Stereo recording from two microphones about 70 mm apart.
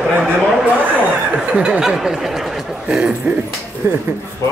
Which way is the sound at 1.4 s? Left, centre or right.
Centre.